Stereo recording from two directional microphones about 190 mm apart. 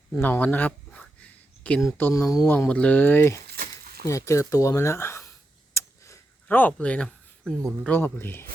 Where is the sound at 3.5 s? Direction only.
55° right (ahead or behind).